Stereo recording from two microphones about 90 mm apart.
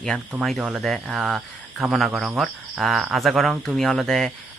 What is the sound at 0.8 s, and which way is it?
Speech, centre (ahead or behind).